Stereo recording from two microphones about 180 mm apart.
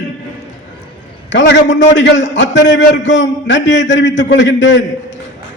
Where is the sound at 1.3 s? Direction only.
80° left.